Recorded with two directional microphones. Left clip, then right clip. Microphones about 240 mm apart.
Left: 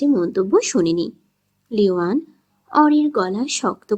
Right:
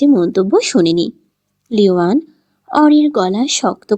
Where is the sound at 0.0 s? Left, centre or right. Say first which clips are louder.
Right 6 dB; right.